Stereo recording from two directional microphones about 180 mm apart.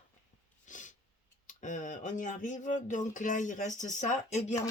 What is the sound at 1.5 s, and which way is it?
Speech, 45° left (ahead or behind).